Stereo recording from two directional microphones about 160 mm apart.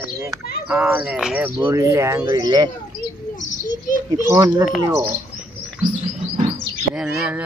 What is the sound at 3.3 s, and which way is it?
Bird, 50° left (ahead or behind).